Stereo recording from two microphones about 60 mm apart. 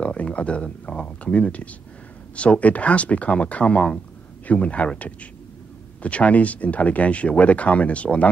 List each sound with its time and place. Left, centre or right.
0.0 s speech: left